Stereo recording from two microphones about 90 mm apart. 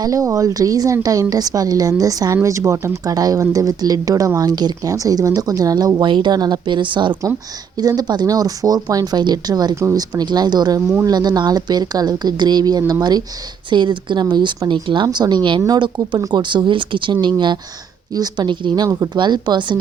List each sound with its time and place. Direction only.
0.0 s speech: 40° right (ahead or behind)
6.0 s speech: 60° right (ahead or behind)
7.8 s speech: 45° right (ahead or behind)
13.7 s speech: 60° right (ahead or behind)
15.6 s speech: 50° right (ahead or behind)
18.9 s speech: 35° right (ahead or behind)
19.1 s speech: 55° right (ahead or behind)